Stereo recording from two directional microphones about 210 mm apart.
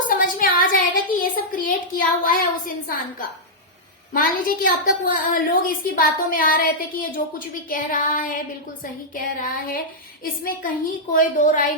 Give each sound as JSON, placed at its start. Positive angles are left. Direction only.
{"t": 0.2, "sound": "a sound", "side_deg": 40}
{"t": 1.2, "sound": "a woman's voice", "side_deg": 40}
{"t": 4.1, "sound": "a woman's voice", "side_deg": 40}